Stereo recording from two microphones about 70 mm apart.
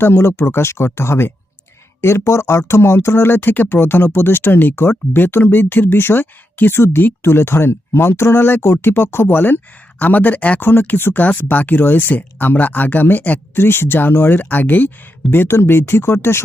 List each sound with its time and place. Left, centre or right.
0.0 s speech: left